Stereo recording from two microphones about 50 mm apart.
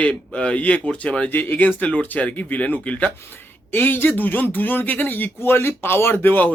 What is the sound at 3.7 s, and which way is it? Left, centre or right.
Speech, left.